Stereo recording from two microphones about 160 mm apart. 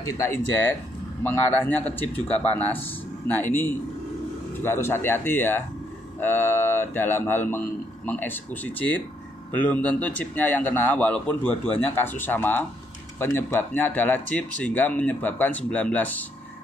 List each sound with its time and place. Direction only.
0.0 s speech: 15° left (ahead or behind)